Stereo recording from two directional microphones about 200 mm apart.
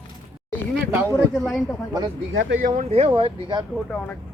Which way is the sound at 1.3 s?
Centre (ahead or behind).